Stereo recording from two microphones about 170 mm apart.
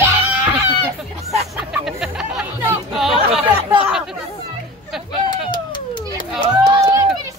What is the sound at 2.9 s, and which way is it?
Chatter, centre (ahead or behind).